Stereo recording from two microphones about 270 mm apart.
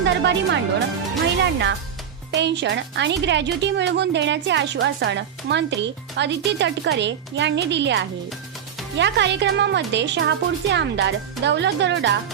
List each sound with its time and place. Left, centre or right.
0.0 s speech: right